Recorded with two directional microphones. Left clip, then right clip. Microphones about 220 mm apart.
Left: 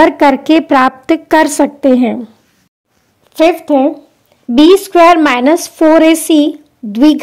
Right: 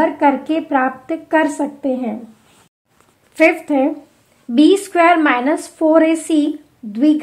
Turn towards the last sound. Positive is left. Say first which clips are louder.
# left 6 dB
turn(degrees=35)  # may be behind; listen again after turning